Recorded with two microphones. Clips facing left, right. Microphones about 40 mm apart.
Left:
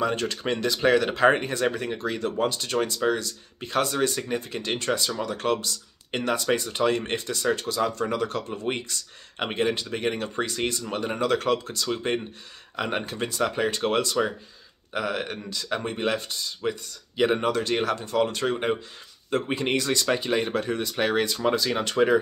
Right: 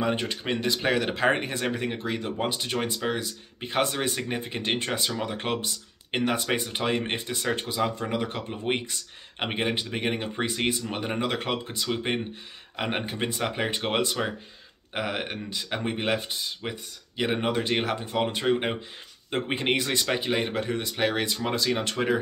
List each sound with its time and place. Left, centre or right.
0.0 s speech: centre
7.3 s speech: right
7.6 s speech: centre